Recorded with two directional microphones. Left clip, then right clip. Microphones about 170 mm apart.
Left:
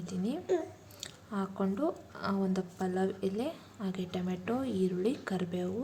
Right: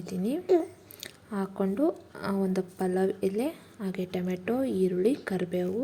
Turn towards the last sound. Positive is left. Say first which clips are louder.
# right 6 dB
turn(degrees=-20)  # may be behind; listen again after turning